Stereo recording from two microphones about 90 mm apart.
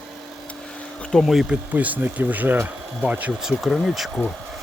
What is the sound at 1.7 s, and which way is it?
Speech, 20° right (ahead or behind).